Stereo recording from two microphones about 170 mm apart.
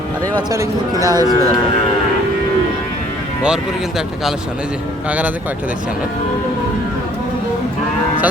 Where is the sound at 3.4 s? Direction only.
5° right (ahead or behind).